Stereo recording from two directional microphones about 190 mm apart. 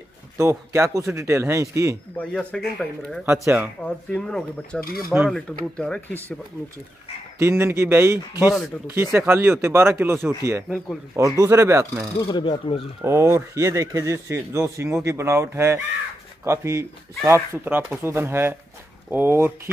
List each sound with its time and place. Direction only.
0.4 s speech: 15° right (ahead or behind)
2.1 s speech: 5° left (ahead or behind)
3.3 s speech: 10° right (ahead or behind)
3.8 s speech: 5° left (ahead or behind)
5.1 s speech: 10° right (ahead or behind)
5.8 s speech: 5° left (ahead or behind)
7.3 s speech: 15° right (ahead or behind)
11.3 s speech: 15° right (ahead or behind)
12.2 s speech: 25° left (ahead or behind)
13.0 s speech: 15° right (ahead or behind)